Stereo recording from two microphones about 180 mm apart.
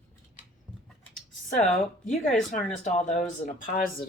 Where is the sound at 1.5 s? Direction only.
45° left (ahead or behind).